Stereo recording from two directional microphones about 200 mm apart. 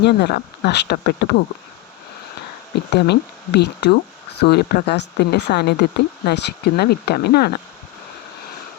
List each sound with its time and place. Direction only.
0.0 s speech: 55° left (ahead or behind)
2.9 s speech: 55° left (ahead or behind)